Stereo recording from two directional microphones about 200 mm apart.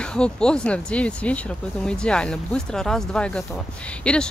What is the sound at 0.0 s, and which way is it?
Speech, 5° left (ahead or behind).